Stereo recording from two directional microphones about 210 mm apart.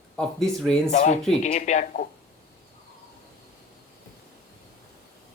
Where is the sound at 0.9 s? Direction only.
35° left (ahead or behind).